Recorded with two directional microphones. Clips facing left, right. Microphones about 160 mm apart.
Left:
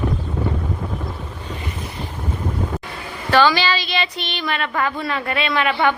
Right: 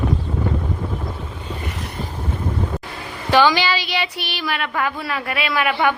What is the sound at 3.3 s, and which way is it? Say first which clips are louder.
Speech: even; 15° right (ahead or behind).